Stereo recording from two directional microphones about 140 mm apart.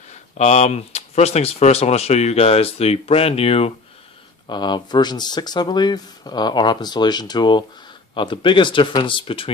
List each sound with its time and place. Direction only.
0.1 s speech: 50° left (ahead or behind)
4.5 s speech: 30° left (ahead or behind)